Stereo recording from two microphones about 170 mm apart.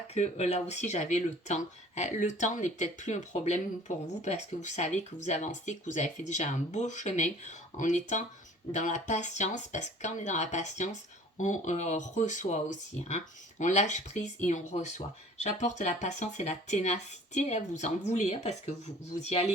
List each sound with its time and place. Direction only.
0.1 s speech: 40° left (ahead or behind)